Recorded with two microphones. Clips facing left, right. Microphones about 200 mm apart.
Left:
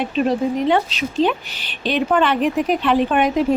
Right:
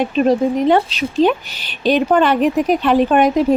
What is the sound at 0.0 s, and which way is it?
Speech, 40° right (ahead or behind).